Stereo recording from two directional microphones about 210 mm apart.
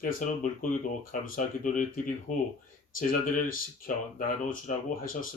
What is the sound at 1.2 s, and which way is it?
Speech, 40° left (ahead or behind).